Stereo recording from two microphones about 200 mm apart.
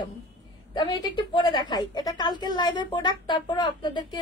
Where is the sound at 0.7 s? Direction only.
20° left (ahead or behind).